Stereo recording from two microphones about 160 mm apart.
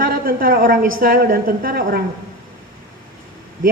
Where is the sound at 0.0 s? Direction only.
65° right (ahead or behind).